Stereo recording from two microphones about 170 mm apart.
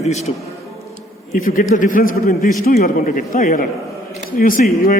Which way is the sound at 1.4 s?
50° left (ahead or behind).